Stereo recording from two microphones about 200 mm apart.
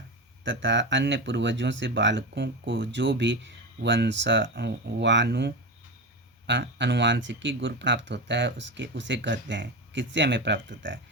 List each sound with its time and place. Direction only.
0.4 s speech: 65° right (ahead or behind)